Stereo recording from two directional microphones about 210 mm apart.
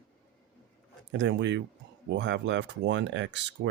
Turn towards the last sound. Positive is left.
turn(degrees=-60)  # may be behind; listen again after turning